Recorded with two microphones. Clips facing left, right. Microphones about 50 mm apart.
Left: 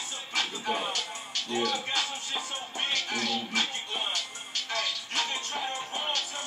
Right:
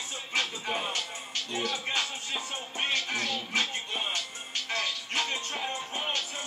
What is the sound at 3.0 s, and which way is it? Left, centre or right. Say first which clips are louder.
Music: left 1 dB; centre.